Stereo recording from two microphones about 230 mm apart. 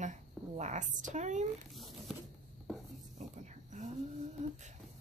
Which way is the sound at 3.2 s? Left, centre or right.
Right.